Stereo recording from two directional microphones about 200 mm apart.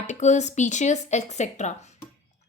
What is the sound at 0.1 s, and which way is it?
A woman's voice, 35° left (ahead or behind).